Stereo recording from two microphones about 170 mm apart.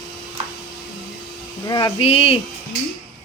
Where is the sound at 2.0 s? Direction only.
35° left (ahead or behind).